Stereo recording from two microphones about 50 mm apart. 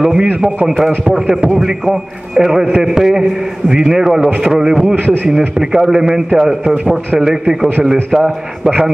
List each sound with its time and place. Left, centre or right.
0.0 s a man's voice: centre